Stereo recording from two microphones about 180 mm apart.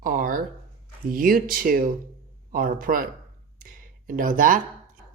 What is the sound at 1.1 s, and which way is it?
Speech, 50° right (ahead or behind).